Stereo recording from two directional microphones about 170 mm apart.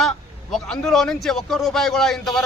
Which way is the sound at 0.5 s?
5° left (ahead or behind).